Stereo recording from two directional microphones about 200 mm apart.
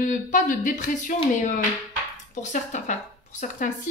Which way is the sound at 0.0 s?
40° left (ahead or behind).